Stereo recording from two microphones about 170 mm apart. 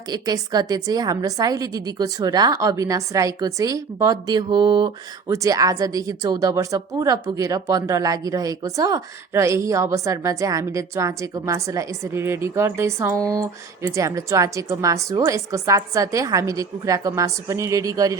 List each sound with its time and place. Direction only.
0.1 s a woman's voice: 25° right (ahead or behind)